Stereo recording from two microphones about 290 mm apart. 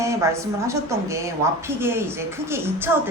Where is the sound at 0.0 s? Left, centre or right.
Centre.